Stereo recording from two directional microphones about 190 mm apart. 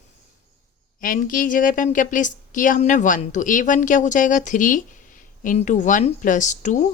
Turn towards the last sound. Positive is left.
turn(degrees=40)  # may be behind; listen again after turning